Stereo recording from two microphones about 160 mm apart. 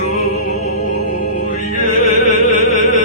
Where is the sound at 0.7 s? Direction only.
65° left (ahead or behind).